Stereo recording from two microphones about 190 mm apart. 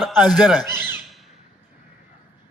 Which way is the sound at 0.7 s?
10° right (ahead or behind).